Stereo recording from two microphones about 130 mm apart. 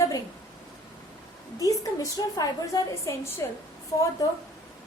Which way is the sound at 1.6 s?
25° left (ahead or behind).